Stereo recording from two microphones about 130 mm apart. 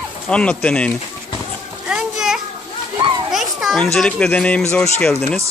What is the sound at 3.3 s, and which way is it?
Children playing, centre (ahead or behind).